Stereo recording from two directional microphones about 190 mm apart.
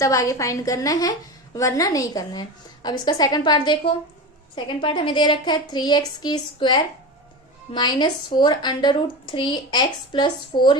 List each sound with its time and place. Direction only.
0.0 s a woman's voice: 15° left (ahead or behind)